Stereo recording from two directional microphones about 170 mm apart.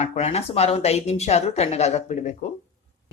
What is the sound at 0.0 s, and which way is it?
Speech, 40° left (ahead or behind).